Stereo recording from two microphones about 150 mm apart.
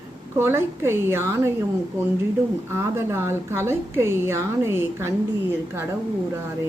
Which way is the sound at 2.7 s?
15° right (ahead or behind).